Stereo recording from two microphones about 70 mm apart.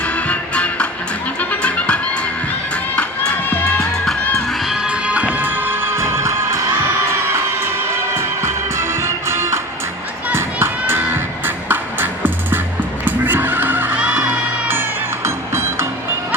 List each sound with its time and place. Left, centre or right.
0.0 s music: centre
2.9 s crowd: centre
4.0 s music: centre
4.9 s music: centre; by 6.6 s right
8.1 s music: right
13.1 s fowl: right
14.0 s music: right